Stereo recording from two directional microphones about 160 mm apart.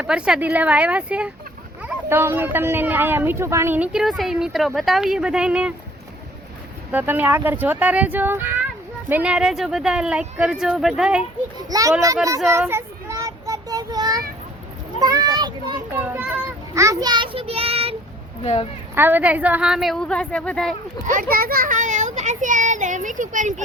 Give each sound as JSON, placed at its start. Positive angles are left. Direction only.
{"t": 0.0, "sound": "speech", "side_deg": -5}
{"t": 6.9, "sound": "speech", "side_deg": -10}
{"t": 11.5, "sound": "a child's voice", "side_deg": -20}
{"t": 12.5, "sound": "child singing", "side_deg": -15}
{"t": 15.0, "sound": "a child's voice", "side_deg": -25}
{"t": 16.0, "sound": "a child's voice", "side_deg": -15}
{"t": 18.4, "sound": "speech", "side_deg": 40}
{"t": 18.9, "sound": "speech", "side_deg": -10}
{"t": 21.1, "sound": "a child's voice", "side_deg": -60}